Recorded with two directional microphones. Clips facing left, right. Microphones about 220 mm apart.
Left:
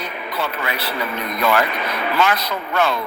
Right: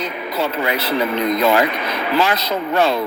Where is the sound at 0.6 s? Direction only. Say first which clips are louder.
Right 6 dB; 20° right (ahead or behind).